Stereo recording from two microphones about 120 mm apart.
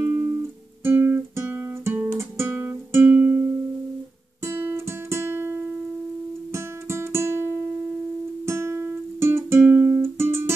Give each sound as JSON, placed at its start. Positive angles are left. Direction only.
{"t": 0.0, "sound": "guitar", "side_deg": -20}
{"t": 4.4, "sound": "music", "side_deg": -20}